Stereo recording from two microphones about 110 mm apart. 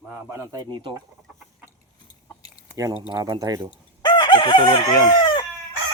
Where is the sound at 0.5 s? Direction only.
40° right (ahead or behind).